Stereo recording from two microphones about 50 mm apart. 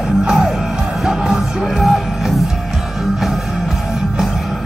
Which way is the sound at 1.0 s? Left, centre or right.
Centre.